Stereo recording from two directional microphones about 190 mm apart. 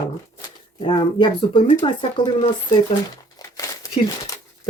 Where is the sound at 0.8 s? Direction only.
25° left (ahead or behind).